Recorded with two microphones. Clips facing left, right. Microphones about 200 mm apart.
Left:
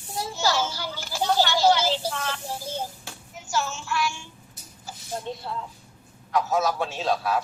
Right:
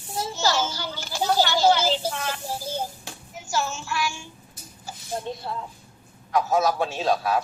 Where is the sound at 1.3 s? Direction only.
20° right (ahead or behind).